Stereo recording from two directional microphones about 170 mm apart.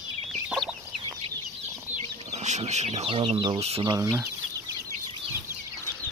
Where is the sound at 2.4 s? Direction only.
40° right (ahead or behind).